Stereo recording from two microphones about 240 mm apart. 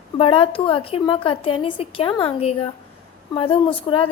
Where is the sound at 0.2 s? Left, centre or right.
Left.